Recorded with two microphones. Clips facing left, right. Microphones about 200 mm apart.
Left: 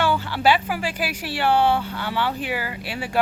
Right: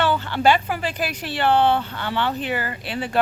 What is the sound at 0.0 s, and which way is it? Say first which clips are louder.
Speech: right 1 dB; 10° left (ahead or behind).